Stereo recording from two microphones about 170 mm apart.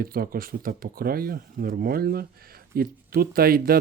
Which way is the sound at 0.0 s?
60° right (ahead or behind).